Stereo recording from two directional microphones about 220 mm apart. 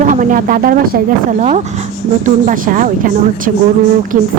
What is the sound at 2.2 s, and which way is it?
A woman's voice, 35° right (ahead or behind).